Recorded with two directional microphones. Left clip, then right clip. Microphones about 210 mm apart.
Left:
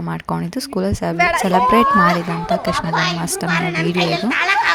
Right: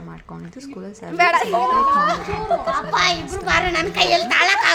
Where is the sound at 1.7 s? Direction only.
45° left (ahead or behind).